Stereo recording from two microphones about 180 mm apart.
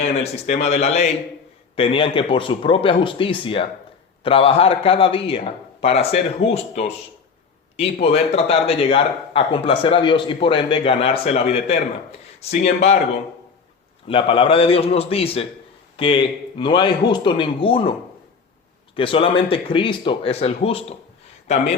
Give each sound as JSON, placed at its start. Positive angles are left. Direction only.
{"t": 0.2, "sound": "a man's voice", "side_deg": 40}
{"t": 14.1, "sound": "a man's voice", "side_deg": 30}
{"t": 18.9, "sound": "a man's voice", "side_deg": 30}